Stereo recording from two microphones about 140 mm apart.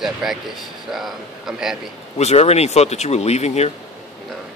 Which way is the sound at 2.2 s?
50° left (ahead or behind).